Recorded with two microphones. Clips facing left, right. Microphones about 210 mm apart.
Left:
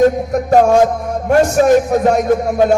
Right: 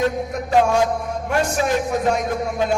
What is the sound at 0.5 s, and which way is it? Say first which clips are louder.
A man's voice: left 6 dB; 45° left (ahead or behind).